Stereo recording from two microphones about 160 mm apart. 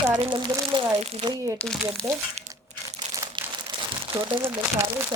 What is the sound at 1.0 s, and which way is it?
Speech, 40° right (ahead or behind).